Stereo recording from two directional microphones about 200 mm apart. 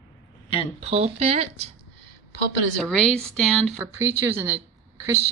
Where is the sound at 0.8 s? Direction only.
30° right (ahead or behind).